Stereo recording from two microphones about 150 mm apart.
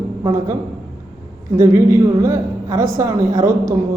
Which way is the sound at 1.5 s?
20° right (ahead or behind).